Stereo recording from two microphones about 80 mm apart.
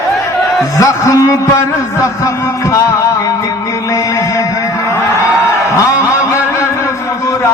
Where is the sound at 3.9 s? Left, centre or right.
Left.